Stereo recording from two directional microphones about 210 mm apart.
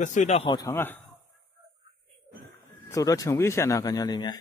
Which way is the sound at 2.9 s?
15° left (ahead or behind).